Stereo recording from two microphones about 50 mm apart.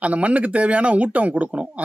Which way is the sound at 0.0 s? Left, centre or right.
Right.